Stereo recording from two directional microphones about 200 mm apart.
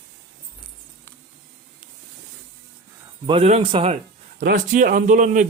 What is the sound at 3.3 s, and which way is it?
Speech, 30° right (ahead or behind).